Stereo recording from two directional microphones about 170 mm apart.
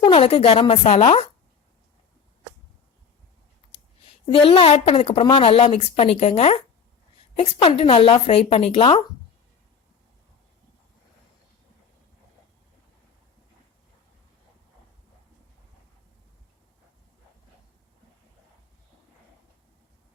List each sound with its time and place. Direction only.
0.0 s a woman's voice: 35° left (ahead or behind)
4.3 s a woman's voice: 35° left (ahead or behind)